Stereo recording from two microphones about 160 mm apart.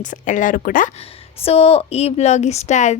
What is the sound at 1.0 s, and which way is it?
A woman's voice, 35° left (ahead or behind).